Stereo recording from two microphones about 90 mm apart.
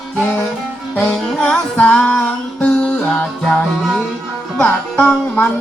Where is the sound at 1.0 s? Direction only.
10° left (ahead or behind).